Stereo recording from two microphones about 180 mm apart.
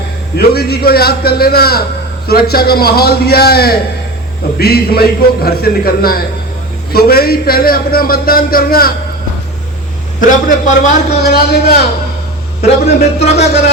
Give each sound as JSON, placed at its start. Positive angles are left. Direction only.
{"t": 0.3, "sound": "a man's voice", "side_deg": 60}
{"t": 10.2, "sound": "a man's voice", "side_deg": 45}
{"t": 11.2, "sound": "a man's voice", "side_deg": 60}
{"t": 12.6, "sound": "speech", "side_deg": 35}